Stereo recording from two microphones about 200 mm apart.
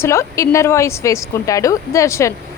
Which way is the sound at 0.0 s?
15° left (ahead or behind).